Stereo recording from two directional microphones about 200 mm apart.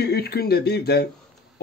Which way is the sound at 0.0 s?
55° left (ahead or behind).